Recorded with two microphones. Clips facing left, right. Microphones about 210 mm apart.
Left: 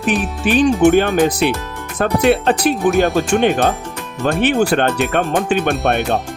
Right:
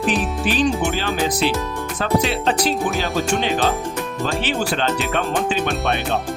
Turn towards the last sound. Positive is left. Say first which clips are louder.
# left 5 dB
turn(degrees=55)  # may be behind; listen again after turning